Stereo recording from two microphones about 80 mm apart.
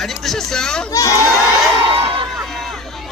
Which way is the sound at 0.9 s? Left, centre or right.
Left.